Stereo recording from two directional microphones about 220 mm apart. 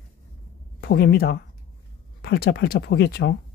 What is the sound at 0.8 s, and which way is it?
Speech, 45° left (ahead or behind).